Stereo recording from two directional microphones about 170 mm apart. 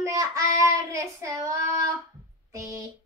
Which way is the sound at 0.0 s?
20° right (ahead or behind).